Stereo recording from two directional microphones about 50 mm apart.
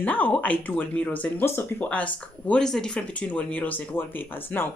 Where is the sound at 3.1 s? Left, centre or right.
Left.